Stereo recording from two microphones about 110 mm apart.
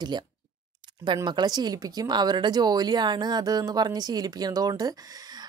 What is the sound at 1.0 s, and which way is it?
Speech, 45° right (ahead or behind).